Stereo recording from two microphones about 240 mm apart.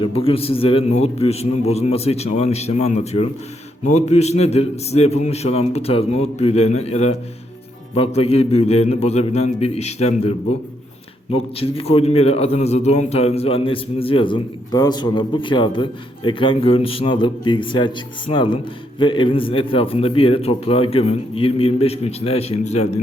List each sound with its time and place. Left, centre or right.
0.0 s a man's voice: left